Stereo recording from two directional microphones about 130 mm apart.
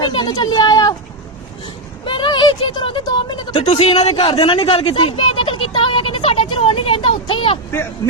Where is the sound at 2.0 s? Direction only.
40° left (ahead or behind).